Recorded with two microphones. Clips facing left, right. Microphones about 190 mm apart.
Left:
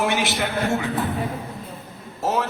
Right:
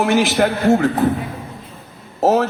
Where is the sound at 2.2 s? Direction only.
45° right (ahead or behind).